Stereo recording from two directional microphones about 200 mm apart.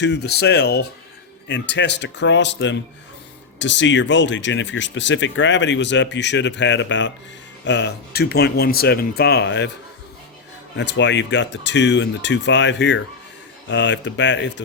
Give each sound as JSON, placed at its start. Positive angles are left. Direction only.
{"t": 0.0, "sound": "speech", "side_deg": 55}
{"t": 10.8, "sound": "speech", "side_deg": 60}